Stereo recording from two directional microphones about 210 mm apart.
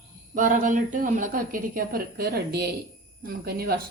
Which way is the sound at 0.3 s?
40° right (ahead or behind).